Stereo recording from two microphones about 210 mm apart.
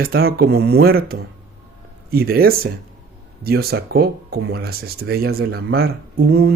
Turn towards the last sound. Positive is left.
turn(degrees=-50)  # may be behind; listen again after turning